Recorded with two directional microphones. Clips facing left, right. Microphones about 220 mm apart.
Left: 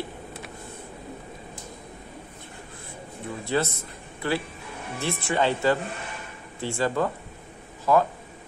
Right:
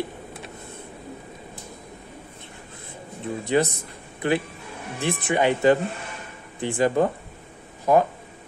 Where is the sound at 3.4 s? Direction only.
15° right (ahead or behind).